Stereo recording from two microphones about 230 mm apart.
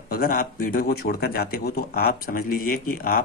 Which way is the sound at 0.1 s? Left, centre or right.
Left.